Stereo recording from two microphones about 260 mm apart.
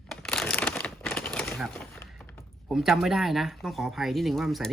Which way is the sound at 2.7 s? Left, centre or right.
Centre.